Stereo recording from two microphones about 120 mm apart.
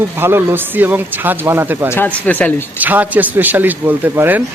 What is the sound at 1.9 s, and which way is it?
Speech, 15° left (ahead or behind).